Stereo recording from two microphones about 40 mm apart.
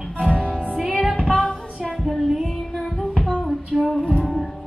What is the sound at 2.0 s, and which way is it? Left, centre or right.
Child singing, centre.